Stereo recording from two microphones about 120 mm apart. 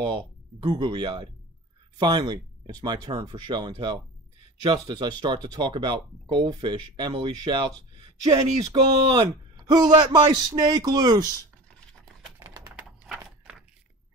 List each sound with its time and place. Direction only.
0.7 s speech: 40° right (ahead or behind)
12.4 s typing: 25° right (ahead or behind)
13.0 s horse: 5° right (ahead or behind)